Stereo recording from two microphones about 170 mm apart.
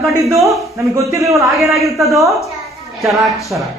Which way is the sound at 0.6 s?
15° right (ahead or behind).